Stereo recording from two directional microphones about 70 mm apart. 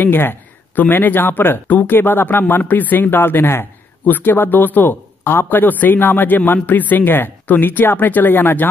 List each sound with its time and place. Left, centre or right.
0.0 s a man's voice: left